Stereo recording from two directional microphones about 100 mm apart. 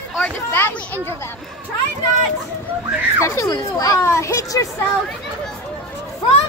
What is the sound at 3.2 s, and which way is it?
Speech, 35° left (ahead or behind).